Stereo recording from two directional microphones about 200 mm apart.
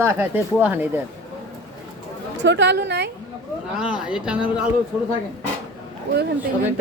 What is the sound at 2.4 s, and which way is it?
Speech, 60° right (ahead or behind).